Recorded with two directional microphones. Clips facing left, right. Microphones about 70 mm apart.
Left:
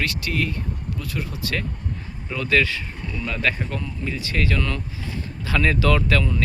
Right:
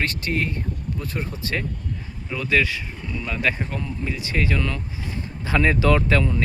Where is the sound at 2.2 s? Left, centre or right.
Centre.